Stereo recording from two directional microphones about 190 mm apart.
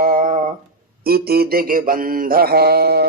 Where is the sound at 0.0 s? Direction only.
50° right (ahead or behind).